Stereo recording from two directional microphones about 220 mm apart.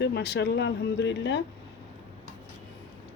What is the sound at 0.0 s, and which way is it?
Speech, 50° left (ahead or behind).